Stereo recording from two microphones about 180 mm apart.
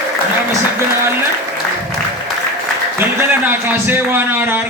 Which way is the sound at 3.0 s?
15° right (ahead or behind).